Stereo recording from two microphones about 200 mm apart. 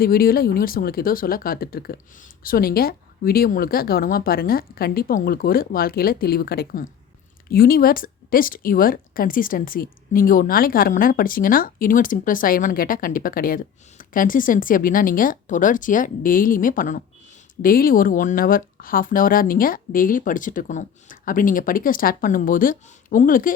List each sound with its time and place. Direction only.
0.0 s speech: 50° left (ahead or behind)